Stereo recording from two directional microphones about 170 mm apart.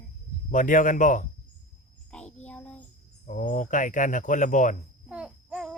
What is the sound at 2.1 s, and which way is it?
Child singing, 10° left (ahead or behind).